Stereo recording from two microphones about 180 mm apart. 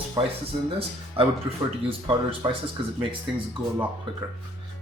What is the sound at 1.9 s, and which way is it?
Speech, 30° right (ahead or behind).